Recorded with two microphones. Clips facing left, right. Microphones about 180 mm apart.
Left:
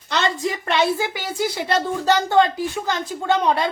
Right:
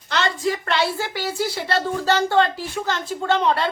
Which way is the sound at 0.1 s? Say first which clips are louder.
Even; 20° left (ahead or behind).